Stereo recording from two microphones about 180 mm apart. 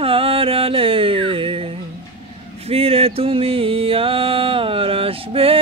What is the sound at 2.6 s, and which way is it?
Mantra, 35° right (ahead or behind).